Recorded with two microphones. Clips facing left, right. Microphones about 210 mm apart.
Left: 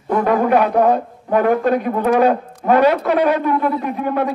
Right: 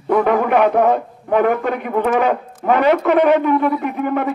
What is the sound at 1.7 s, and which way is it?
Speech, 40° left (ahead or behind).